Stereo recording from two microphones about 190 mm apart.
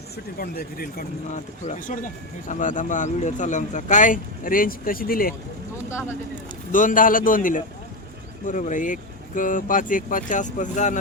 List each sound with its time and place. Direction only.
0.3 s speech: 50° left (ahead or behind)
5.9 s speech: 15° left (ahead or behind)
6.7 s speech: 45° left (ahead or behind)